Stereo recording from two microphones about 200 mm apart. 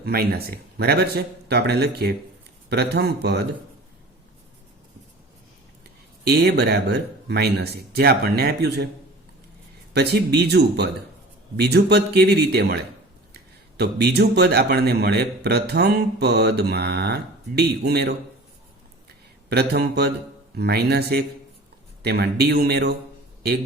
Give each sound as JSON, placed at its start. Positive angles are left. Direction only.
{"t": 0.0, "sound": "a man's voice", "side_deg": -50}
{"t": 6.2, "sound": "speech", "side_deg": -55}
{"t": 9.9, "sound": "a man's voice", "side_deg": -55}
{"t": 19.5, "sound": "speech", "side_deg": -55}